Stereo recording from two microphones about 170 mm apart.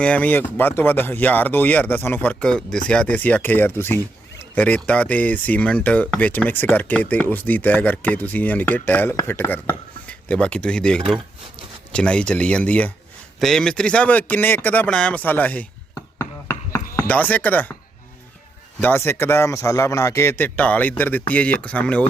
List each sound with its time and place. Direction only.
0.0 s speech: 10° left (ahead or behind)
16.1 s a sound: 15° left (ahead or behind)
16.9 s speech: 15° left (ahead or behind)
18.8 s speech: 10° left (ahead or behind)